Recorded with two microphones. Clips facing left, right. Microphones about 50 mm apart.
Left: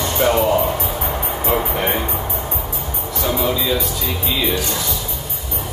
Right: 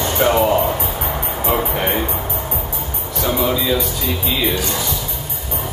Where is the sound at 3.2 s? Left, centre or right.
Centre.